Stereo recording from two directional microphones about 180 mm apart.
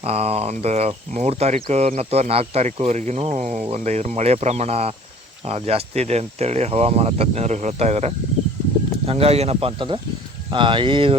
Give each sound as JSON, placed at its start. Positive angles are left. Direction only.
{"t": 0.0, "sound": "speech", "side_deg": -35}